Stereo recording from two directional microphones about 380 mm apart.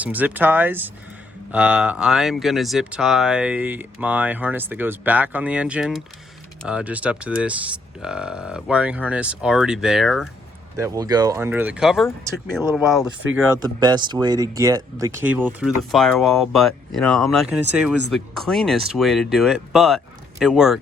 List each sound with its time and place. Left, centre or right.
0.0 s speech: centre